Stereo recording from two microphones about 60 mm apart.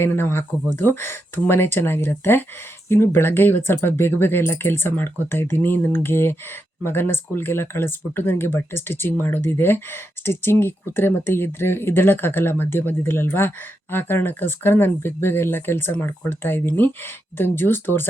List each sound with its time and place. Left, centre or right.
0.0 s speech: left